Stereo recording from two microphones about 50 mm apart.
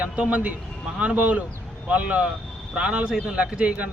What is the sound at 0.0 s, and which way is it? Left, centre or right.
Speech, right.